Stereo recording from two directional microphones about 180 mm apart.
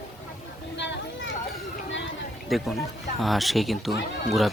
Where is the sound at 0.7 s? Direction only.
80° left.